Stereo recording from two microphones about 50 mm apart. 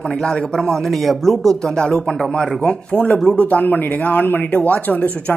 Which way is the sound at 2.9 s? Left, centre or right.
Left.